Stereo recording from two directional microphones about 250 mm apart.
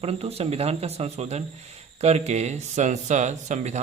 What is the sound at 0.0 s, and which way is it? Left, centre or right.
Speech, right.